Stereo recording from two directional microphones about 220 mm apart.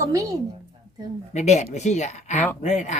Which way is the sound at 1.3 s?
30° left (ahead or behind).